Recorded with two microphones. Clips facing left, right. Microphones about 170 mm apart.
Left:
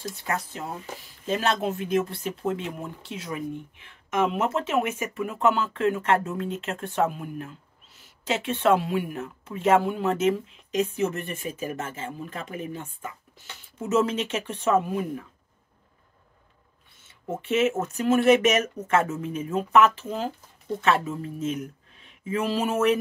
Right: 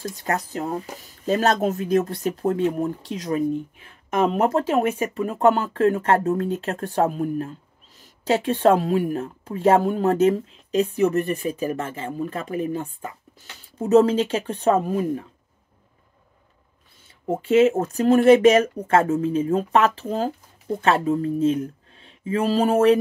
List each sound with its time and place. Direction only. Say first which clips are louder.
0.1 s speech: right 5 dB; 40° right (ahead or behind)
17.3 s speech: right 7 dB; 30° right (ahead or behind)